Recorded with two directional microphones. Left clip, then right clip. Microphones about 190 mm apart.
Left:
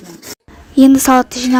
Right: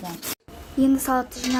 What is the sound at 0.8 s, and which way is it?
Speech, 45° left (ahead or behind).